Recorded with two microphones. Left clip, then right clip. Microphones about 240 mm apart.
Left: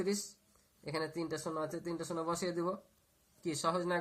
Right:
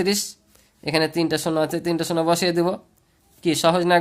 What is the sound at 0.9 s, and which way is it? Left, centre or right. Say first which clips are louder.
Speech: right 17 dB; right.